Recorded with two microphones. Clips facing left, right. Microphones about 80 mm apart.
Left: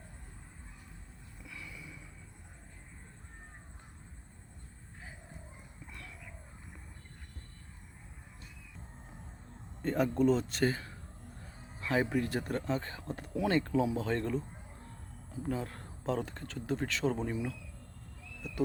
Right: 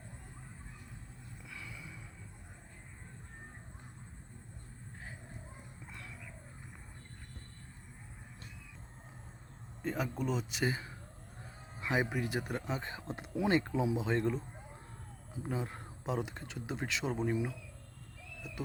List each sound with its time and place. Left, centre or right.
1.5 s vehicle: right
9.8 s speech: centre
18.4 s a sound: centre